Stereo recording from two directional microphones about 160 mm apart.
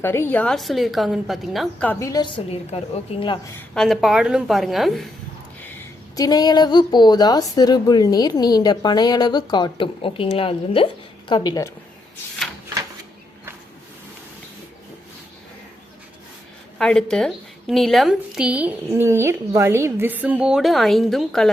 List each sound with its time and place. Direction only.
0.0 s a woman's voice: 15° left (ahead or behind); by 1.9 s centre (ahead or behind)
1.9 s a woman's voice: 20° left (ahead or behind); by 3.3 s 35° left (ahead or behind)
3.8 s a woman's voice: centre (ahead or behind)
6.1 s a woman's voice: 25° left (ahead or behind)
16.7 s a woman's voice: 5° left (ahead or behind)